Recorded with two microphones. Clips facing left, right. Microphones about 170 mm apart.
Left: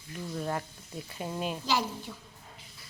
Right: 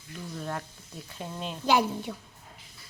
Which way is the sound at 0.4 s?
5° left (ahead or behind).